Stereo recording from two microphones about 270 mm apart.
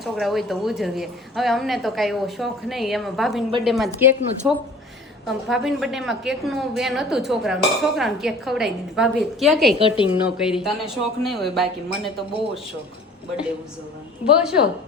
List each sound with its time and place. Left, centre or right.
0.0 s a woman's voice: centre
9.8 s a woman's voice: centre
10.2 s a woman's voice: centre
14.4 s a woman's voice: centre